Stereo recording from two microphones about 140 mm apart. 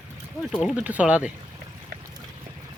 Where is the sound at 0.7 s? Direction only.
10° right (ahead or behind).